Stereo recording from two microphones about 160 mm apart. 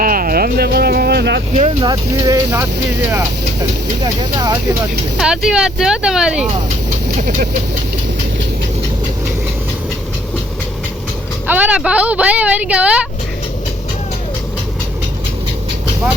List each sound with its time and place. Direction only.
0.0 s music: 60° right (ahead or behind); by 1.4 s 85° right
1.8 s speech: 25° right (ahead or behind)
5.1 s speech: 5° right (ahead or behind)
11.4 s speech: 10° right (ahead or behind)